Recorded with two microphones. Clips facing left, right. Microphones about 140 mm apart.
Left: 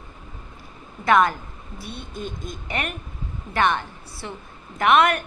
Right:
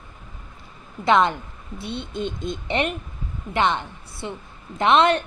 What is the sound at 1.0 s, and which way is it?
A woman's voice, 25° right (ahead or behind).